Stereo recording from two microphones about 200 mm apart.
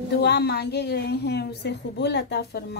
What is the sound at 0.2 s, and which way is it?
A woman's voice, 55° left (ahead or behind).